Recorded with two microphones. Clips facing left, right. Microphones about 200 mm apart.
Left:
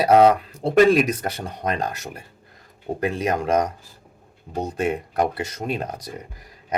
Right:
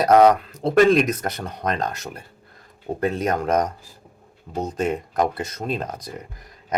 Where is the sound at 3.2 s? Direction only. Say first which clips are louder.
Left 1 dB; 10° left (ahead or behind).